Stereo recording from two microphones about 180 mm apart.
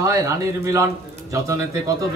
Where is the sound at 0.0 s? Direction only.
15° right (ahead or behind).